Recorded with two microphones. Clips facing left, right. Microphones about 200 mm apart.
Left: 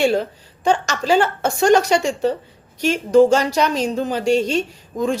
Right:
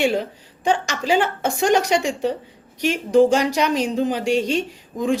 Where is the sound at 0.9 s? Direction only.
15° right (ahead or behind).